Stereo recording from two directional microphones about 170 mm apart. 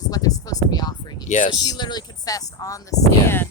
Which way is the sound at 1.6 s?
25° left (ahead or behind).